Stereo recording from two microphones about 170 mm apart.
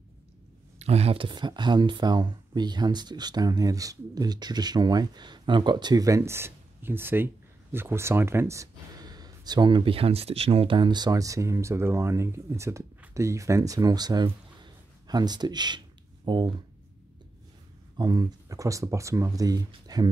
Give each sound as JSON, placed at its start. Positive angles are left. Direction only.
{"t": 0.7, "sound": "speech", "side_deg": -40}
{"t": 17.9, "sound": "speech", "side_deg": -25}